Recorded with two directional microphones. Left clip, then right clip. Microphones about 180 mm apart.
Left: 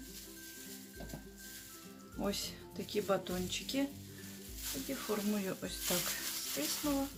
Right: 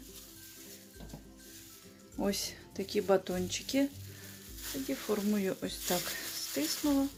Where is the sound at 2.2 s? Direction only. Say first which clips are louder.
Right 4 dB; 40° right (ahead or behind).